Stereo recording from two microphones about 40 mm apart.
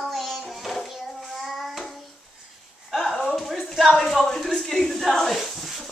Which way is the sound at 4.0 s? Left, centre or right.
Centre.